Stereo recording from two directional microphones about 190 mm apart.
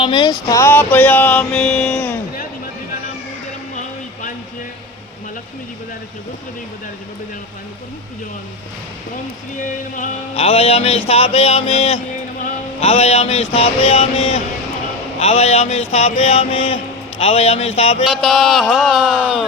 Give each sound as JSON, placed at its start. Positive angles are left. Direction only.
{"t": 0.0, "sound": "mantra", "side_deg": 25}
{"t": 9.9, "sound": "speech", "side_deg": 35}
{"t": 12.5, "sound": "a sound", "side_deg": 30}
{"t": 15.2, "sound": "speech", "side_deg": 35}
{"t": 18.1, "sound": "speech", "side_deg": 0}